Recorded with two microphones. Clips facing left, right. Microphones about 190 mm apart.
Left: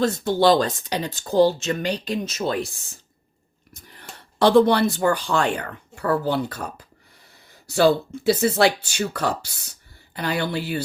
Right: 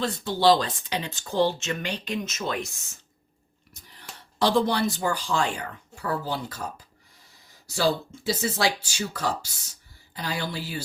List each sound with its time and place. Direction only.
0.0 s speech: 45° left (ahead or behind)
3.8 s speech: 55° left (ahead or behind)
7.7 s speech: 60° left (ahead or behind)